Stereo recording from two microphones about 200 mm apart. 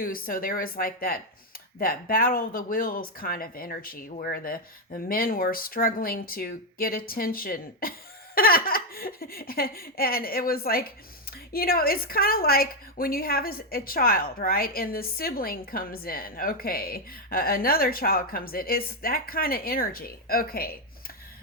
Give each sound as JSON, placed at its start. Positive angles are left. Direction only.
{"t": 0.0, "sound": "speech", "side_deg": 45}